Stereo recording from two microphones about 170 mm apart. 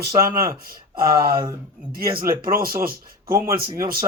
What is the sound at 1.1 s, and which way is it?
Speech, 60° right (ahead or behind).